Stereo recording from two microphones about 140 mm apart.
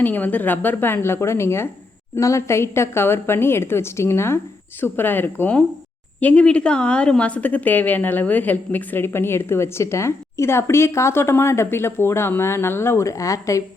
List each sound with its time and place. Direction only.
0.0 s a woman's voice: 10° left (ahead or behind)